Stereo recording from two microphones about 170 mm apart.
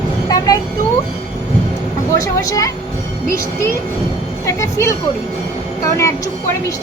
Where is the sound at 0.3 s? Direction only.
20° left (ahead or behind).